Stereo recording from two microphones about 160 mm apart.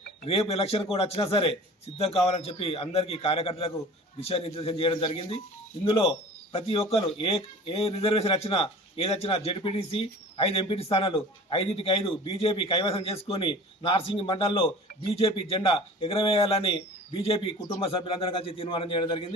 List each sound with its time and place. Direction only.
0.3 s speech: 40° left (ahead or behind)